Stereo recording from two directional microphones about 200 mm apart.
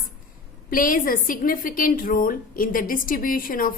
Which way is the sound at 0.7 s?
45° left (ahead or behind).